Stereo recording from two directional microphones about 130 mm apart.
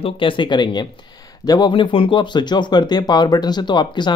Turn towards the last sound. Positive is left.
turn(degrees=35)  # may be behind; listen again after turning